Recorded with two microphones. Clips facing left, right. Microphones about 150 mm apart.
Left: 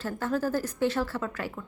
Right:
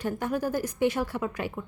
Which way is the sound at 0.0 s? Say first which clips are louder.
Even; 15° right (ahead or behind).